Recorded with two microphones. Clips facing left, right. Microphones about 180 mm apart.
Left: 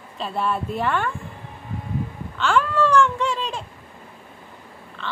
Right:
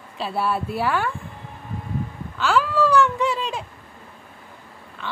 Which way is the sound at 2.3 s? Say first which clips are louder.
Even; 5° right (ahead or behind).